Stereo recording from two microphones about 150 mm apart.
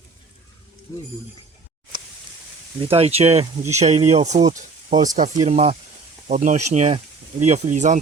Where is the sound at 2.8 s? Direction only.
40° right (ahead or behind).